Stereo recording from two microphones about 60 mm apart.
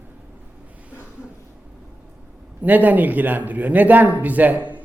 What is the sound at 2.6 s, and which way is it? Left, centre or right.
Speech, right.